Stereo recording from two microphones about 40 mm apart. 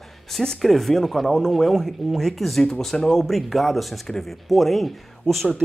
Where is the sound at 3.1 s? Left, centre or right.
Centre.